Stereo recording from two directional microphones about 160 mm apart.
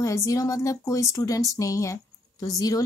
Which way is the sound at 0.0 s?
20° left (ahead or behind).